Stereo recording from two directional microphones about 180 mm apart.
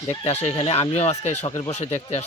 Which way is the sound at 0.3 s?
35° left (ahead or behind).